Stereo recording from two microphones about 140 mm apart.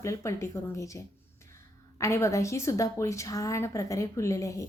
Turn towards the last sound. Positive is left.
turn(degrees=25)  # may be behind; listen again after turning